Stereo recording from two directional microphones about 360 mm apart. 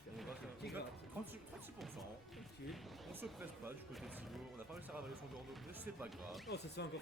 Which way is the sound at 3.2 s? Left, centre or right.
Centre.